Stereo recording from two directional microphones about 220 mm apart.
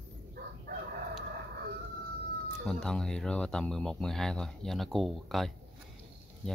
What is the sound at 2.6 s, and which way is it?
Speech, 5° left (ahead or behind).